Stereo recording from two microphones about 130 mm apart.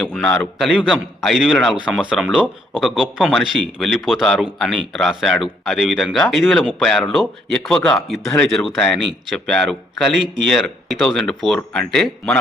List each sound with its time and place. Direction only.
0.1 s a man's voice: 5° left (ahead or behind)